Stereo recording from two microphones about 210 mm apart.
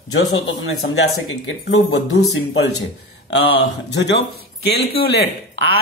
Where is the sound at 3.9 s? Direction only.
55° left (ahead or behind).